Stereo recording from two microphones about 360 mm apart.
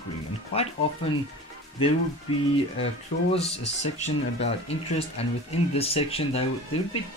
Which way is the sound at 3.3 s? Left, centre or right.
Centre.